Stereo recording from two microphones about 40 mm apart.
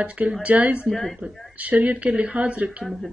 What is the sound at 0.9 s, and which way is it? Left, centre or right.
Speech, centre.